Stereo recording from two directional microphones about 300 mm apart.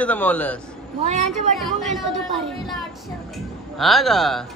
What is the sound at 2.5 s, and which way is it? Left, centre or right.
Speech, centre.